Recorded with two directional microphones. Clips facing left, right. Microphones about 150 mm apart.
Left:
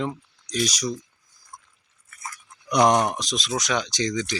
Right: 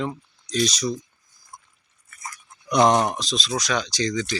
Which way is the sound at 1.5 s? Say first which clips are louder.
Even; 5° right (ahead or behind).